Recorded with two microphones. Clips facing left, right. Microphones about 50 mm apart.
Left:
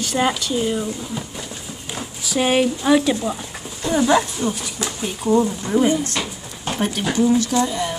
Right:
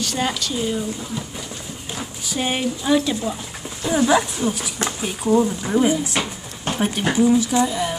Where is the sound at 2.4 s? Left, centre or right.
Left.